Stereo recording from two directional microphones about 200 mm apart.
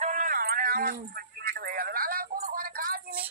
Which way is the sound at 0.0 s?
40° right (ahead or behind).